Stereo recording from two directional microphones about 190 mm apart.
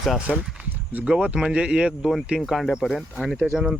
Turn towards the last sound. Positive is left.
turn(degrees=-5)  # may be behind; listen again after turning